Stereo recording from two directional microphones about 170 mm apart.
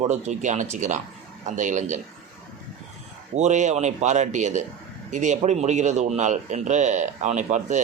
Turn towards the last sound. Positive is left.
turn(degrees=-45)  # may be behind; listen again after turning